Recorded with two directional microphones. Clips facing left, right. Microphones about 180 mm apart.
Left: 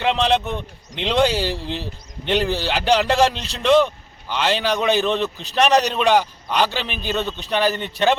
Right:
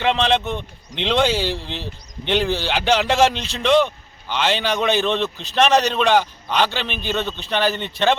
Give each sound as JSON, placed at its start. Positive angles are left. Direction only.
{"t": 0.0, "sound": "a man's voice", "side_deg": 5}
{"t": 3.3, "sound": "a man's voice", "side_deg": 35}
{"t": 3.6, "sound": "a man's voice", "side_deg": 0}